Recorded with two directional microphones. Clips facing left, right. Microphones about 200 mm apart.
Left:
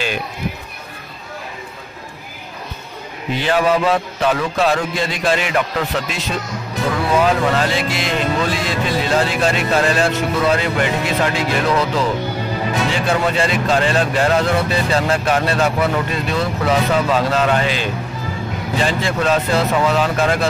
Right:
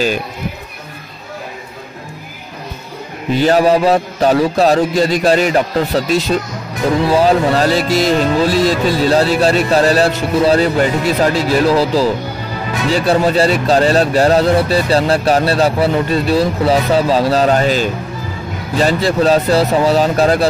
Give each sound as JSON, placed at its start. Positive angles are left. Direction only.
{"t": 3.3, "sound": "speech", "side_deg": -40}